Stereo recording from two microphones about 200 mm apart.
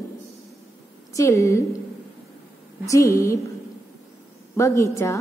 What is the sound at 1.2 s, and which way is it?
Speech, 15° left (ahead or behind).